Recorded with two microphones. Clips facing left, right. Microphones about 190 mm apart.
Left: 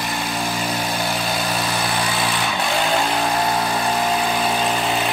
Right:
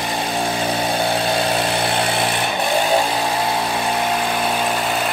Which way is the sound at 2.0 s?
60° right (ahead or behind).